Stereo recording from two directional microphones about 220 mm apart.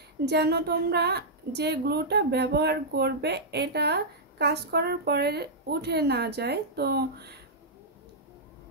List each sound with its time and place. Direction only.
0.2 s a woman's voice: 50° right (ahead or behind)